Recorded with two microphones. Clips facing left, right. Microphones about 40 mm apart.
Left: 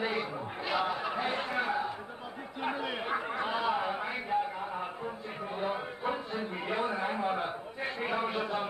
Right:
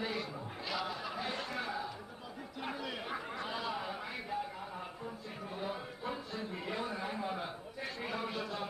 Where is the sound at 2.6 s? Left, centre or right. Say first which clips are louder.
Left 7 dB; left.